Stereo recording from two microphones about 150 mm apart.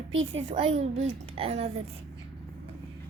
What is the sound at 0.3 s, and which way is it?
A child's voice, 50° right (ahead or behind).